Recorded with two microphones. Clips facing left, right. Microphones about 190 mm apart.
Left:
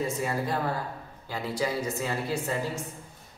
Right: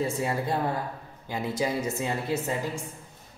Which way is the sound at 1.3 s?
20° right (ahead or behind).